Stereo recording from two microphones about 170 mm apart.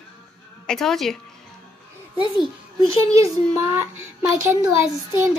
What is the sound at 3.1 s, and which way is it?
Speech, 20° right (ahead or behind).